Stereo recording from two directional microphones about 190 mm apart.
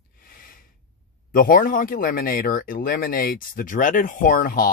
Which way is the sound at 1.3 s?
50° left (ahead or behind).